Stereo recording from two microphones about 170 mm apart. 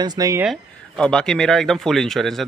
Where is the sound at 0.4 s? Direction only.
Centre (ahead or behind).